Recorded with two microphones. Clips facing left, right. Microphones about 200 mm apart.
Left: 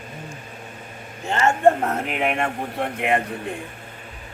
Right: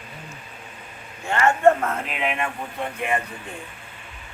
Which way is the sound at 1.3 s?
25° left (ahead or behind).